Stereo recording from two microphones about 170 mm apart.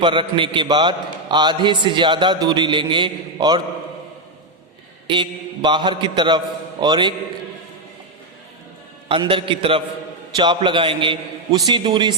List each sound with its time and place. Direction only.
0.0 s a man's voice: 30° right (ahead or behind)
5.0 s a man's voice: 25° right (ahead or behind)
9.0 s a man's voice: 30° right (ahead or behind)